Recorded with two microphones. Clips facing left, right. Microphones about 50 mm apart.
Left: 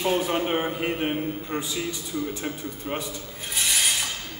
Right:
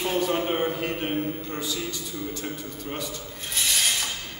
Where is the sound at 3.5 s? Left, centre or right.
Centre.